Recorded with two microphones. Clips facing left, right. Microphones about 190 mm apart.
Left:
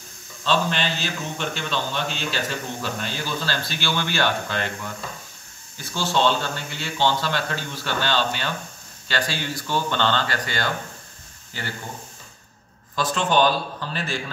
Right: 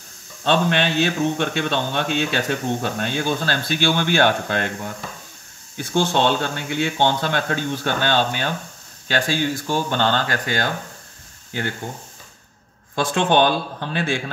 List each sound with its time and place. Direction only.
0.4 s speech: 60° right (ahead or behind)
5.8 s speech: 55° right (ahead or behind)
12.9 s speech: 60° right (ahead or behind)